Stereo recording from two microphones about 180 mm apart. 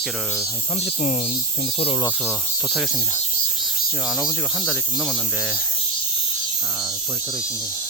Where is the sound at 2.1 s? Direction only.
5° right (ahead or behind).